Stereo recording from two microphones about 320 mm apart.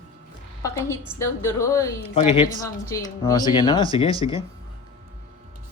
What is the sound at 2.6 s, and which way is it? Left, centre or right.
Speech, centre.